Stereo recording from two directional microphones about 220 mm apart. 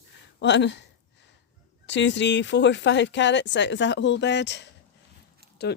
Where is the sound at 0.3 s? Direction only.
55° left (ahead or behind).